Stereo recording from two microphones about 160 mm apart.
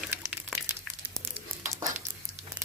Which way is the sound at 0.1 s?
5° right (ahead or behind).